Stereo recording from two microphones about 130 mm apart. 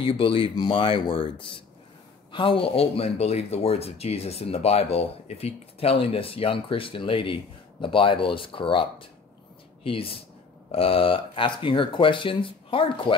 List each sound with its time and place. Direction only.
0.0 s speech: 45° left (ahead or behind)